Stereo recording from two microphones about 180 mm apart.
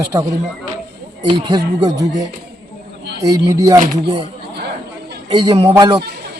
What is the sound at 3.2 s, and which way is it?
Speech, 20° right (ahead or behind).